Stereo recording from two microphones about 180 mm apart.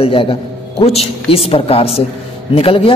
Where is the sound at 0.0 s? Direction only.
30° left (ahead or behind).